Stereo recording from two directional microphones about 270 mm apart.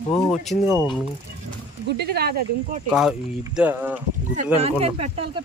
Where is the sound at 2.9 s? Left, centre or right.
Centre.